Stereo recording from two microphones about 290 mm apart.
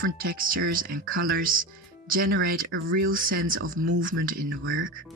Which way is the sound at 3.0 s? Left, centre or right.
Right.